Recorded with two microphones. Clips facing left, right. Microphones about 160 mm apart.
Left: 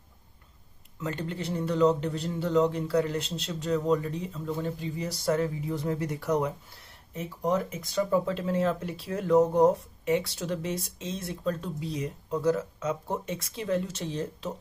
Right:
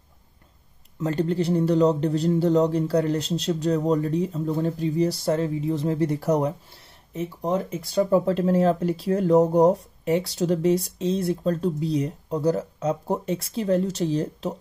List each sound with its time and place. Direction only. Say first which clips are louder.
1.0 s speech: right 10 dB; 35° right (ahead or behind)